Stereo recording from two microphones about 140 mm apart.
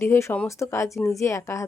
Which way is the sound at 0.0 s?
20° left (ahead or behind).